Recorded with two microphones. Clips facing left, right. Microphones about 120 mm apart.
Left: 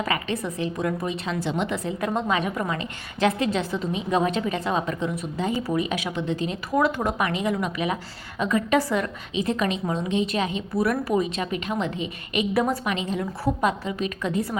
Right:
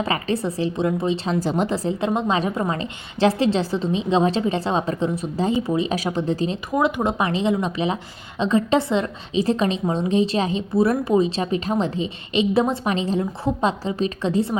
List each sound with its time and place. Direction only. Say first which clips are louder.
0.0 s a woman's voice: right 4 dB; 30° right (ahead or behind)
6.7 s a woman's voice: right 1 dB; 20° right (ahead or behind)